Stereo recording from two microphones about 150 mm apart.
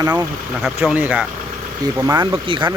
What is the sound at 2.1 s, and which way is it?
Speech, 30° right (ahead or behind).